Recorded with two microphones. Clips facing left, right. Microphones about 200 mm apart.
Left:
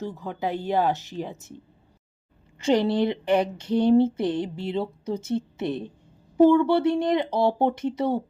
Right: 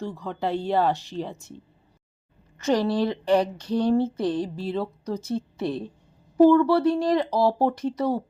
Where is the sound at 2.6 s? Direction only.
25° left (ahead or behind).